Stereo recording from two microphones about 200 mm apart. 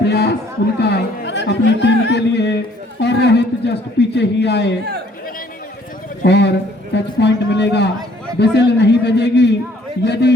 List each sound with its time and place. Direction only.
0.0 s a sound: 55° left (ahead or behind)
0.8 s a man's voice: 55° left (ahead or behind)
6.2 s a man's voice: 60° left (ahead or behind)